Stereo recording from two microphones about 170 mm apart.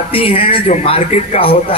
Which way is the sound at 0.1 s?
35° left (ahead or behind).